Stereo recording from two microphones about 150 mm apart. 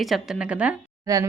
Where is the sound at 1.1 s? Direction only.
25° right (ahead or behind).